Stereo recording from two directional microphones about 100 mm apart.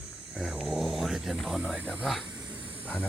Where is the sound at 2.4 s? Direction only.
10° right (ahead or behind).